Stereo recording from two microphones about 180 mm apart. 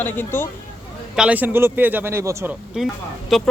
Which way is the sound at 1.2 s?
10° right (ahead or behind).